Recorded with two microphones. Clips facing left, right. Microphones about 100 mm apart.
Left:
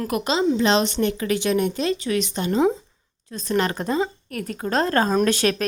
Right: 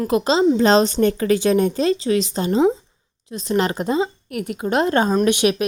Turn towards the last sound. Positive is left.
turn(degrees=-15)  # may be behind; listen again after turning